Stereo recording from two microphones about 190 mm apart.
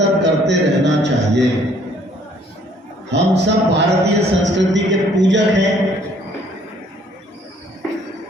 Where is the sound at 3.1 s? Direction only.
65° right (ahead or behind).